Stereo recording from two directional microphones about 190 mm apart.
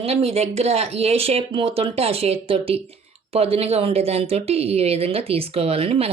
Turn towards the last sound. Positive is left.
turn(degrees=-30)  # may be behind; listen again after turning